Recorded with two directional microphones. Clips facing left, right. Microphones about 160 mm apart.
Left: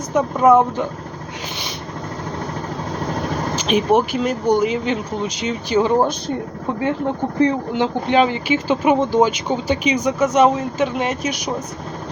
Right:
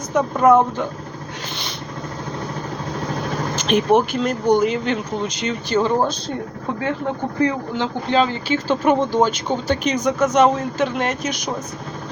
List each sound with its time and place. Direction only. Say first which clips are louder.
0.2 s speech: left 1 dB; 5° left (ahead or behind)
3.7 s speech: even; 5° left (ahead or behind)
5.6 s speech: left 2 dB; 15° left (ahead or behind)
7.3 s speech: left 4 dB; 25° left (ahead or behind); by 11.5 s 10° left (ahead or behind)